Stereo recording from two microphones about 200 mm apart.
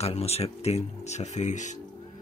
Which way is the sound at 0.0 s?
30° left (ahead or behind).